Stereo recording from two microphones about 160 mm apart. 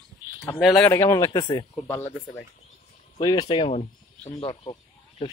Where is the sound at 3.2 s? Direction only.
25° left (ahead or behind).